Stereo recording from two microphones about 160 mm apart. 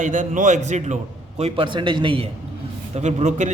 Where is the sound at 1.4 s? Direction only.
30° right (ahead or behind).